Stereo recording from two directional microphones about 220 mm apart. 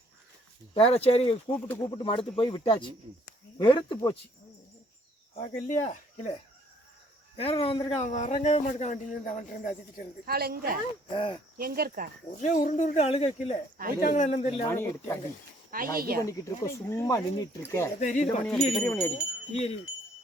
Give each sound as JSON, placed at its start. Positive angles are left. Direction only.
{"t": 0.7, "sound": "speech", "side_deg": 25}
{"t": 5.3, "sound": "speech", "side_deg": 30}
{"t": 7.3, "sound": "speech", "side_deg": 25}
{"t": 10.2, "sound": "a woman's voice", "side_deg": -45}
{"t": 11.1, "sound": "speech", "side_deg": 25}
{"t": 11.5, "sound": "speech", "side_deg": -40}
{"t": 12.4, "sound": "speech", "side_deg": 35}
{"t": 14.7, "sound": "speech", "side_deg": 10}
{"t": 15.7, "sound": "speech", "side_deg": -40}
{"t": 16.2, "sound": "speech", "side_deg": 15}
{"t": 18.0, "sound": "speech", "side_deg": 35}
{"t": 18.7, "sound": "speech", "side_deg": 10}
{"t": 19.1, "sound": "speech", "side_deg": 25}